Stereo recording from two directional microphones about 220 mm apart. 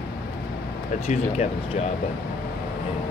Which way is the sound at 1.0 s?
30° left (ahead or behind).